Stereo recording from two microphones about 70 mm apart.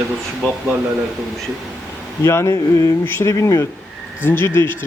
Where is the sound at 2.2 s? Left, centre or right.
Left.